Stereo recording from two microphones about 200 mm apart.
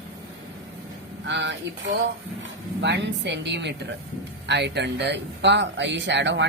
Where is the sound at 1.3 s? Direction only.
65° right (ahead or behind).